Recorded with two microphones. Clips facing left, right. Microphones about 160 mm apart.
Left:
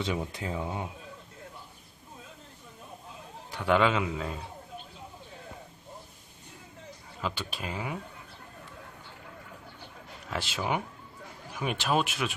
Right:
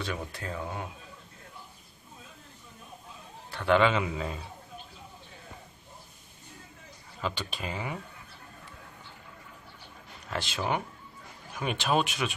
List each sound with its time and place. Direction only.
0.0 s speech: 20° left (ahead or behind)
3.5 s a man's voice: 10° left (ahead or behind)
7.2 s a man's voice: 5° left (ahead or behind)
10.2 s a man's voice: 5° left (ahead or behind)